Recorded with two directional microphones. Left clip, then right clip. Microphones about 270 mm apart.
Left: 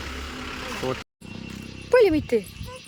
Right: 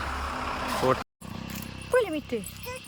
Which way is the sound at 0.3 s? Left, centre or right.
Centre.